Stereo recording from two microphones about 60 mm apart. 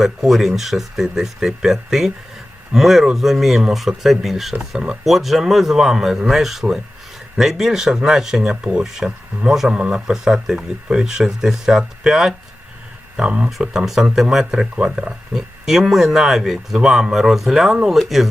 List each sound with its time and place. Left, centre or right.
0.0 s speech: centre